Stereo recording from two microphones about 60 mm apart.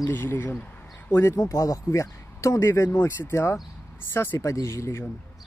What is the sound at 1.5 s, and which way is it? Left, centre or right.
Speech, left.